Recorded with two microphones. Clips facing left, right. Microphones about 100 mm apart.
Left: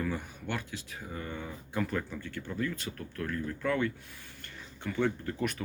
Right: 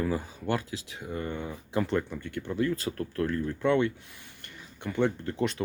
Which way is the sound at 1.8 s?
20° right (ahead or behind).